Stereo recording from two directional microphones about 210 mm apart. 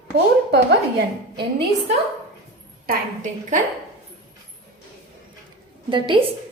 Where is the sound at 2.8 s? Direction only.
35° right (ahead or behind).